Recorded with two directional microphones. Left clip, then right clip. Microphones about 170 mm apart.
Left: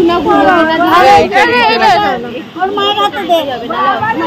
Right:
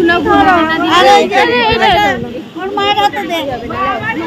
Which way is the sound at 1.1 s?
35° right (ahead or behind).